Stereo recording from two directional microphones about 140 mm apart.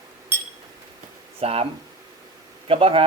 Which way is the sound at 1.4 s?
45° right (ahead or behind).